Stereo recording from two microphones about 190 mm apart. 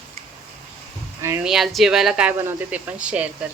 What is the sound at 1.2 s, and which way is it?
Speech, 15° right (ahead or behind).